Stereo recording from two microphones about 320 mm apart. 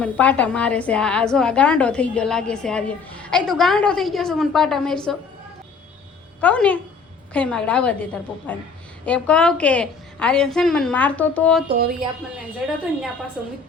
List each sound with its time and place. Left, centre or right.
0.0 s a woman's voice: centre
6.4 s a woman's voice: centre
11.7 s speech: right
12.6 s a woman's voice: centre